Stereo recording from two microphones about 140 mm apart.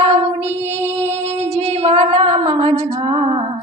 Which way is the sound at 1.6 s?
50° right (ahead or behind).